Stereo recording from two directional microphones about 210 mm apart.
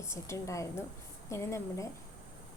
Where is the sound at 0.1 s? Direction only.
15° left (ahead or behind).